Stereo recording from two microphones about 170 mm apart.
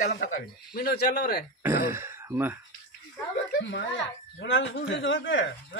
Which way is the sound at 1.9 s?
15° right (ahead or behind).